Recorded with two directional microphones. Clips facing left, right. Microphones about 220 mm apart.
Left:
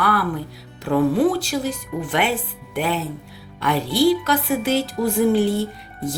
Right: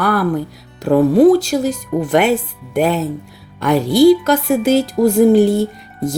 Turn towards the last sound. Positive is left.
turn(degrees=-45)  # may be behind; listen again after turning